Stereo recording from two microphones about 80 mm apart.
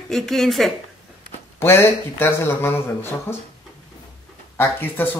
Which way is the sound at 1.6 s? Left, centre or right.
Left.